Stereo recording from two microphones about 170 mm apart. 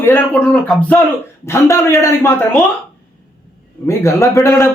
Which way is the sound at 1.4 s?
15° left (ahead or behind).